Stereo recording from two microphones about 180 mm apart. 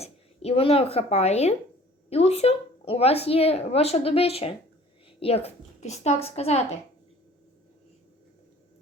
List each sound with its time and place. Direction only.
0.0 s a woman's voice: 35° left (ahead or behind)